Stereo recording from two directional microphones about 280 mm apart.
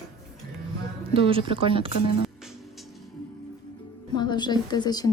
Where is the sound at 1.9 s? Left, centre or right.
Left.